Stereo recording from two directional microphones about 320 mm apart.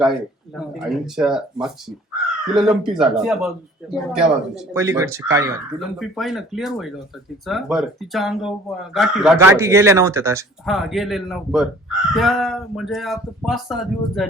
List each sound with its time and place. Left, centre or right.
0.0 s speech: centre